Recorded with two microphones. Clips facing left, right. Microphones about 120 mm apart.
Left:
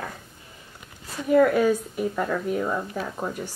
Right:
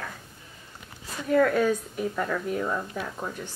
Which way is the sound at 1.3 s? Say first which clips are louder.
Left 3 dB; 5° left (ahead or behind).